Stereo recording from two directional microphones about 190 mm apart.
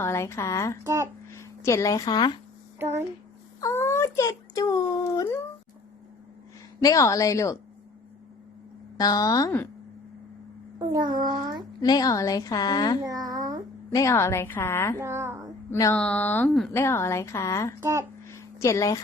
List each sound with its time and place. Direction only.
0.0 s speech: 15° left (ahead or behind)
0.9 s speech: 15° right (ahead or behind)
1.3 s speech: 15° left (ahead or behind)
3.6 s speech: 15° left (ahead or behind)
6.8 s speech: 15° left (ahead or behind)
9.0 s a woman's voice: 20° left (ahead or behind)
10.8 s a child's voice: 20° right (ahead or behind)
11.8 s a woman's voice: 20° left (ahead or behind)
13.1 s a sound: 20° right (ahead or behind)
13.9 s speech: 15° left (ahead or behind)
14.9 s a child's voice: 15° right (ahead or behind)
15.7 s speech: 15° left (ahead or behind)
17.7 s speech: 15° right (ahead or behind)
18.3 s a sound: 15° left (ahead or behind)